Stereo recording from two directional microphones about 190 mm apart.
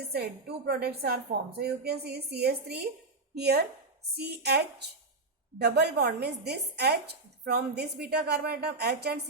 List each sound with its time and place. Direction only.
0.0 s speech: 60° right (ahead or behind)